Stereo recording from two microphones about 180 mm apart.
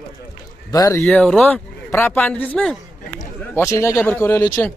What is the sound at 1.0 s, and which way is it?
Speech, 5° left (ahead or behind).